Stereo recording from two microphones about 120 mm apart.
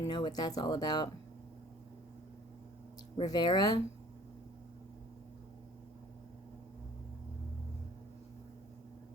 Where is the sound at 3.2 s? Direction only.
35° left (ahead or behind).